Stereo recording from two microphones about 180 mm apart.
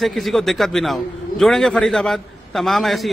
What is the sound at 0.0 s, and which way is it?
A man's voice, centre (ahead or behind).